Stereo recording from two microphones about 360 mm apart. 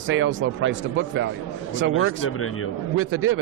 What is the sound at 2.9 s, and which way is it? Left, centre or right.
Speech, right.